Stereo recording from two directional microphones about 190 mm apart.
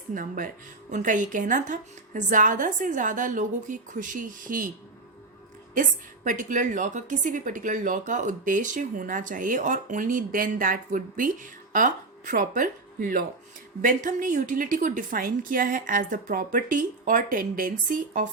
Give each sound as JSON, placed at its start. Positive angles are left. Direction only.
{"t": 0.1, "sound": "a woman's voice", "side_deg": -45}
{"t": 5.7, "sound": "a woman's voice", "side_deg": -45}